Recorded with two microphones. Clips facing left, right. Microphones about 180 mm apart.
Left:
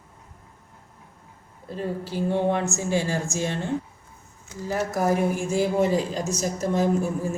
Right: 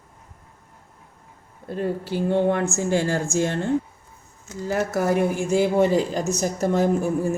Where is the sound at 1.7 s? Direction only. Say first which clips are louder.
Right 4 dB; 60° right (ahead or behind).